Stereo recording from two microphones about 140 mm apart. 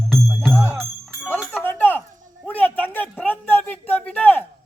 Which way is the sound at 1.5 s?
15° left (ahead or behind).